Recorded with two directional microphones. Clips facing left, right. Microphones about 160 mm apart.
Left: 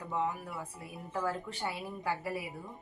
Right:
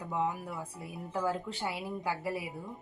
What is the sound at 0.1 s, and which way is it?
A woman's voice, 15° right (ahead or behind).